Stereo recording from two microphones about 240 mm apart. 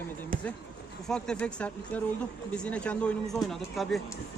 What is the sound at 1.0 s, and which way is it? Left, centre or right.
Speech, centre.